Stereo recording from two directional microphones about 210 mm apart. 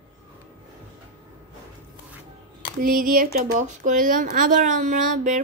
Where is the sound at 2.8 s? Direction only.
40° right (ahead or behind).